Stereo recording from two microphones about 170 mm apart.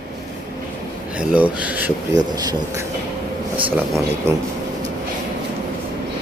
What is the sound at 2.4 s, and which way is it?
Speech, 20° right (ahead or behind).